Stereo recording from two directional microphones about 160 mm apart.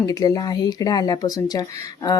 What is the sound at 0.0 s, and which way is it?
Speech, 20° left (ahead or behind).